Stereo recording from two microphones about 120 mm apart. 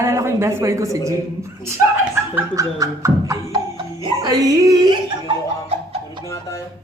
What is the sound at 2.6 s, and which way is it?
A woman's voice, 25° right (ahead or behind).